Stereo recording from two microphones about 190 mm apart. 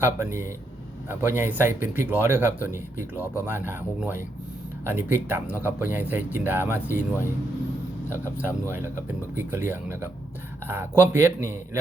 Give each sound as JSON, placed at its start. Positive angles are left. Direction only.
{"t": 0.0, "sound": "speech", "side_deg": -15}
{"t": 8.1, "sound": "speech", "side_deg": -10}